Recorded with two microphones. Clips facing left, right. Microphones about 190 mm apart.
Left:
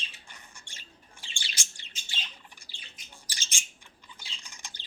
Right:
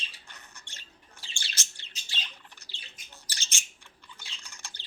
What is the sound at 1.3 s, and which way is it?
Bird, 15° left (ahead or behind).